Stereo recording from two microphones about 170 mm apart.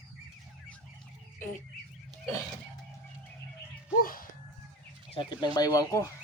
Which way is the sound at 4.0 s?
55° left (ahead or behind).